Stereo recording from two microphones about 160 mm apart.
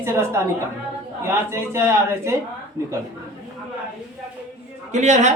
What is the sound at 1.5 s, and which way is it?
Speech, 15° right (ahead or behind).